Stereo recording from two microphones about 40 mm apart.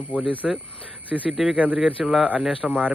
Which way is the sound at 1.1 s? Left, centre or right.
Centre.